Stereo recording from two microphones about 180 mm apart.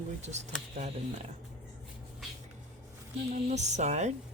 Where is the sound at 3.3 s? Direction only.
40° right (ahead or behind).